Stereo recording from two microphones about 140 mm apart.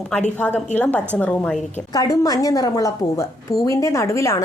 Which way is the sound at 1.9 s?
25° left (ahead or behind).